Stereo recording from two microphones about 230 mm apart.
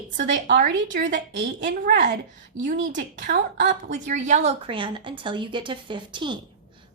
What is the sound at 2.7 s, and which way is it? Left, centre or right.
Speech, right.